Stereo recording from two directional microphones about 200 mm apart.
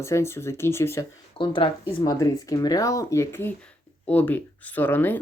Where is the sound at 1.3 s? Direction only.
25° left (ahead or behind).